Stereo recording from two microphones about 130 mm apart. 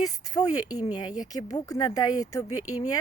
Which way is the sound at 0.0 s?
30° left (ahead or behind).